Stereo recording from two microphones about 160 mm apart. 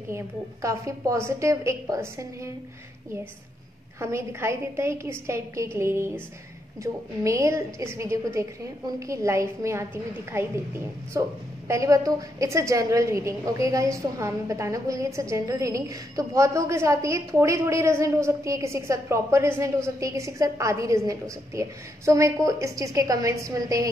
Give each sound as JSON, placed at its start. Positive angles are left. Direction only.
{"t": 0.1, "sound": "a woman's voice", "side_deg": -20}
{"t": 4.0, "sound": "a woman's voice", "side_deg": -15}